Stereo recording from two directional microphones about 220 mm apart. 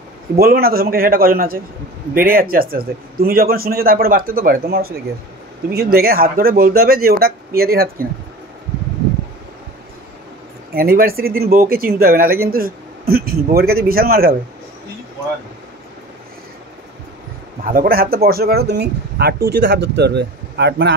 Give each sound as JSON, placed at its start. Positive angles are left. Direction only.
{"t": 0.4, "sound": "a man's voice", "side_deg": -45}
{"t": 10.7, "sound": "speech", "side_deg": -40}
{"t": 17.6, "sound": "speech", "side_deg": -40}